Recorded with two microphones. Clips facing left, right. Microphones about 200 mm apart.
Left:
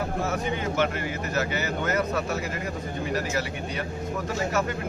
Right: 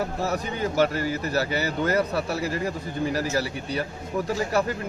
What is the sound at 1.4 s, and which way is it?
Speech, 35° right (ahead or behind).